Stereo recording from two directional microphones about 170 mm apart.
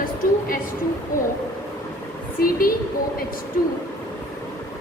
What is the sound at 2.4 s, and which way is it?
Speech, 55° left (ahead or behind).